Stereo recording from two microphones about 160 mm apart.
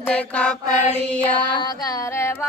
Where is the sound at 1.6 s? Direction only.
20° left (ahead or behind).